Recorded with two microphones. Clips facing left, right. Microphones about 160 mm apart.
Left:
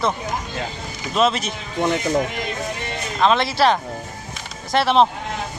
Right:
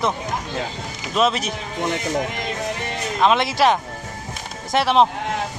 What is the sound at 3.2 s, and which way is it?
Speech, 15° right (ahead or behind).